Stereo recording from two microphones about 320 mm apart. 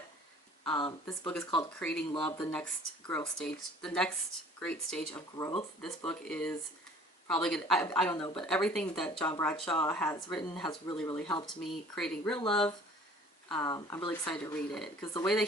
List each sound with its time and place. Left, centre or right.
1.0 s speech: centre
8.1 s speech: centre
8.4 s speech: centre